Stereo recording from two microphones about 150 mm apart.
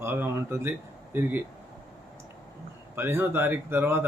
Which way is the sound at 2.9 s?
15° right (ahead or behind).